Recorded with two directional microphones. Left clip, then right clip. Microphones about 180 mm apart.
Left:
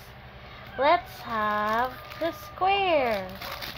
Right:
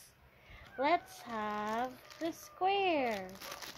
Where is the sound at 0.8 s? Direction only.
60° right (ahead or behind).